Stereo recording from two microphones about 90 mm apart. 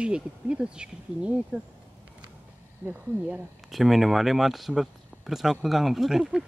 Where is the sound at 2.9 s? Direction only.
20° right (ahead or behind).